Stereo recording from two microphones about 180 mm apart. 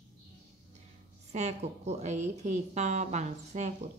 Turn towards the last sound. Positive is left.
turn(degrees=-40)  # may be behind; listen again after turning